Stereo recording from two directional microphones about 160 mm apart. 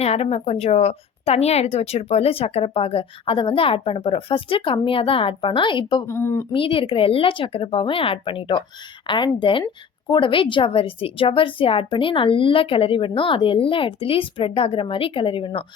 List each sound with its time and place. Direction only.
0.0 s a woman's voice: 40° left (ahead or behind)
6.1 s speech: 15° left (ahead or behind)
6.5 s a woman's voice: 35° left (ahead or behind)